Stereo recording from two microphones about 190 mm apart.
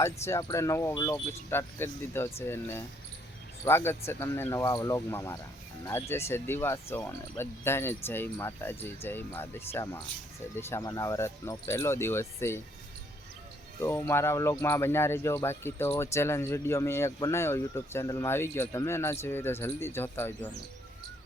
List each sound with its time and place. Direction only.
0.0 s speech: 15° left (ahead or behind)
13.8 s speech: 15° left (ahead or behind)